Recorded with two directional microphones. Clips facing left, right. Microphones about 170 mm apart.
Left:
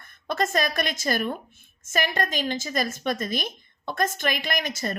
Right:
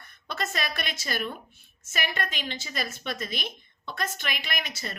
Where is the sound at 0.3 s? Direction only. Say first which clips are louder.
Left 7 dB; 45° left (ahead or behind).